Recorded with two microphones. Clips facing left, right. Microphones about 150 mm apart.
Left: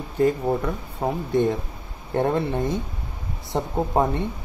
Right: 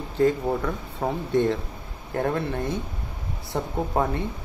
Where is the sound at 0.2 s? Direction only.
10° left (ahead or behind).